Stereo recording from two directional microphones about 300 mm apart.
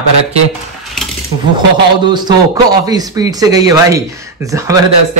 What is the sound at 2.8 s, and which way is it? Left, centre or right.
A man's voice, centre.